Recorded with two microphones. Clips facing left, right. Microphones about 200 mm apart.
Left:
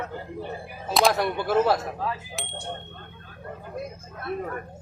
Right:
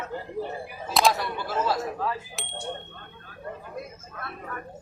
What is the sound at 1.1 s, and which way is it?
Speech, 60° left (ahead or behind).